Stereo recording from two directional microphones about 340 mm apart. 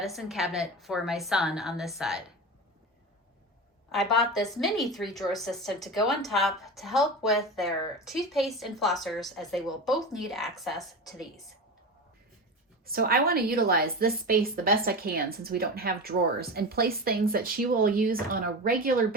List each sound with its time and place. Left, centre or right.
0.0 s a woman's voice: centre
3.9 s a woman's voice: centre
12.8 s a woman's voice: right